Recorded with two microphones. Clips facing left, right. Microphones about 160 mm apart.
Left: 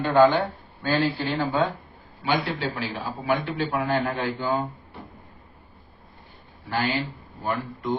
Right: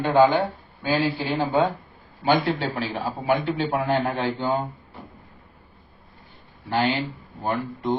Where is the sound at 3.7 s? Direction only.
30° right (ahead or behind).